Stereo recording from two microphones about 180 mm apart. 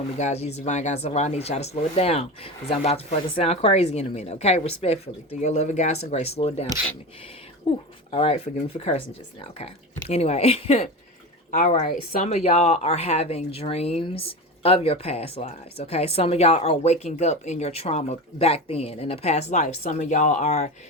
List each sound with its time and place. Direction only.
0.2 s speech: 40° left (ahead or behind)
8.1 s speech: 30° left (ahead or behind)
11.5 s speech: 45° left (ahead or behind)